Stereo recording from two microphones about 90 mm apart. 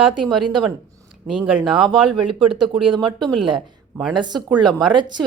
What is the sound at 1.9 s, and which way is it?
Speech, 65° right (ahead or behind).